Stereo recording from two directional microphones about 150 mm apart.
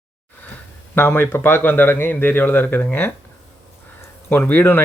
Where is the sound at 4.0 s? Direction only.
15° left (ahead or behind).